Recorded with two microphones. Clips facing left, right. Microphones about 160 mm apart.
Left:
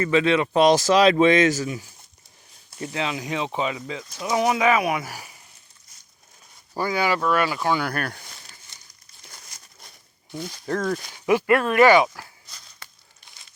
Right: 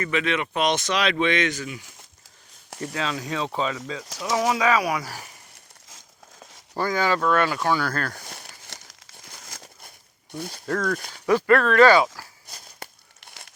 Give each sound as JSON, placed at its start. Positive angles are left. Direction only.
{"t": 0.0, "sound": "a man's voice", "side_deg": 30}
{"t": 2.8, "sound": "speech", "side_deg": 20}
{"t": 6.7, "sound": "speech", "side_deg": 10}
{"t": 8.3, "sound": "crumpling", "side_deg": -65}
{"t": 10.7, "sound": "speech", "side_deg": 25}
{"t": 12.5, "sound": "a sound", "side_deg": -50}
{"t": 13.1, "sound": "a sound", "side_deg": -70}